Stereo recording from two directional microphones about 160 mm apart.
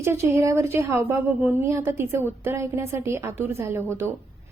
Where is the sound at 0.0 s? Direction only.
20° right (ahead or behind).